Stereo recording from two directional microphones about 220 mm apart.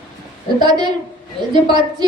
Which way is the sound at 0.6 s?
20° right (ahead or behind).